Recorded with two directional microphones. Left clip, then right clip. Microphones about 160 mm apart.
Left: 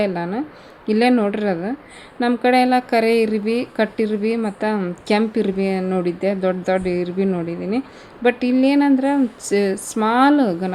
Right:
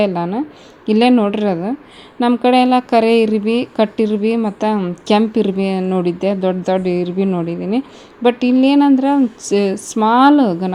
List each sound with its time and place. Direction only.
0.0 s a woman's voice: 15° right (ahead or behind)